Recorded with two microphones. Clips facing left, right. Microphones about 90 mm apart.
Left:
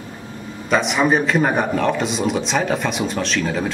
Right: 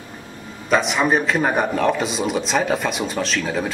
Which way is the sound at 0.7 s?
Centre (ahead or behind).